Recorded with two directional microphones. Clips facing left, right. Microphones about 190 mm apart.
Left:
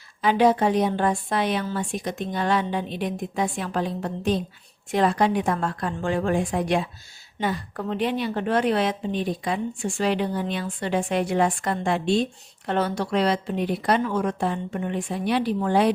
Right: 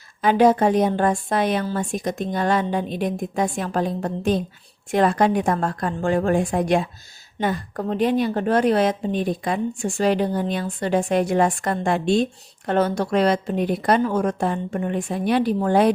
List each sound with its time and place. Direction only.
0.2 s a woman's voice: 45° right (ahead or behind)